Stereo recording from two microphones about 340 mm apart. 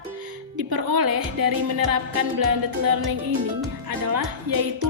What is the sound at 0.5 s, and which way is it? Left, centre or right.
A woman's voice, right.